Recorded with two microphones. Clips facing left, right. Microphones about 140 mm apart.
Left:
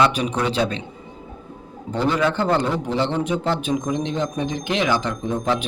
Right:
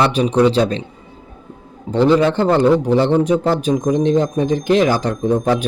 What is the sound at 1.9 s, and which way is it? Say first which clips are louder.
A man's voice: right 7 dB; 35° right (ahead or behind).